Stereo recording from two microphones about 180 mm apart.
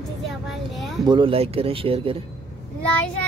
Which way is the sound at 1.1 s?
30° right (ahead or behind).